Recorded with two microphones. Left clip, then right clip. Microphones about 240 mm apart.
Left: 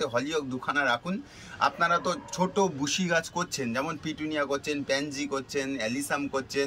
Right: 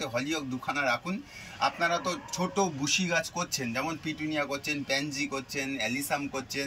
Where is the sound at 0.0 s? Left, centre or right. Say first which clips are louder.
Left 3 dB; centre.